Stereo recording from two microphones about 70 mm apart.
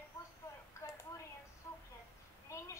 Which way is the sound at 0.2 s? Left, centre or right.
Left.